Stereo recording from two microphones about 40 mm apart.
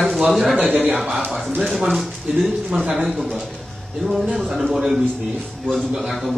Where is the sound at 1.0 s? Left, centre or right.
Centre.